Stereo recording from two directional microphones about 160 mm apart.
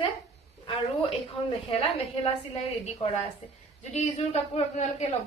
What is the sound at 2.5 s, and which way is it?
A woman's voice, 40° left (ahead or behind).